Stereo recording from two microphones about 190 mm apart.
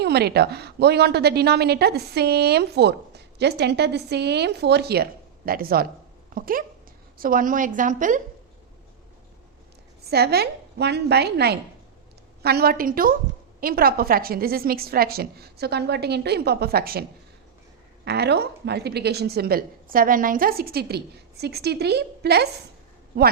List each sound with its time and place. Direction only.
0.0 s a woman's voice: 60° right (ahead or behind); by 8.2 s 45° right (ahead or behind)
10.1 s a woman's voice: 55° right (ahead or behind)